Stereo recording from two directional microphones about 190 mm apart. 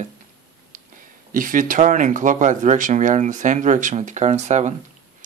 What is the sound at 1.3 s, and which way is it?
Speech, 45° right (ahead or behind).